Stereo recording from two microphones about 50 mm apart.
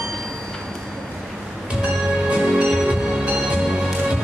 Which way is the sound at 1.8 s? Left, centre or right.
Right.